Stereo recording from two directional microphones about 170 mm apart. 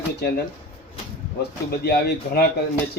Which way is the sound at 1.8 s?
70° left (ahead or behind).